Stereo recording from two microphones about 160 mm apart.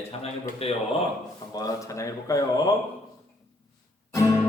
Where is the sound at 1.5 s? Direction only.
20° left (ahead or behind).